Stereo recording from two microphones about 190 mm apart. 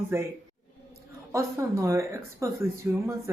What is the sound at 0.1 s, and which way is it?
Speech, 15° right (ahead or behind).